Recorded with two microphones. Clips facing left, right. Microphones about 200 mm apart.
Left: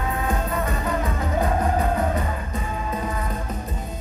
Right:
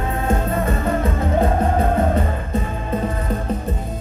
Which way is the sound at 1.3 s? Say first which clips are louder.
Right 3 dB; 30° right (ahead or behind).